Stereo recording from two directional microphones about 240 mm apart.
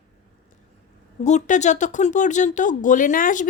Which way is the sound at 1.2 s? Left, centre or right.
Left.